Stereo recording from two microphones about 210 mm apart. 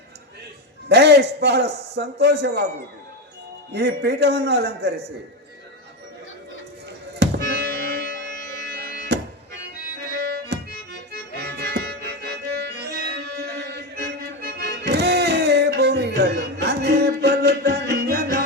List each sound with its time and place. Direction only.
0.9 s a man's voice: 50° right (ahead or behind)
3.7 s a man's voice: 50° right (ahead or behind)
7.2 s music: 50° right (ahead or behind)